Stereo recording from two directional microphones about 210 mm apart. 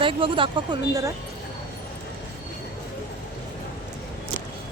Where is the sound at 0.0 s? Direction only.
25° right (ahead or behind).